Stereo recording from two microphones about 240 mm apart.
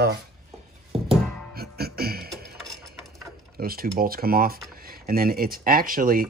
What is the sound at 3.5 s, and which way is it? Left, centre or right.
Speech, right.